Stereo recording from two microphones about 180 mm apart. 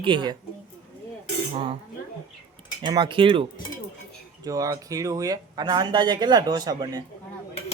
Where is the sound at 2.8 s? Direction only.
25° right (ahead or behind).